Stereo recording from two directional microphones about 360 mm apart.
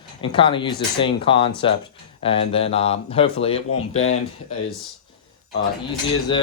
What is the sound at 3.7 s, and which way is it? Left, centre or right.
Speech, left.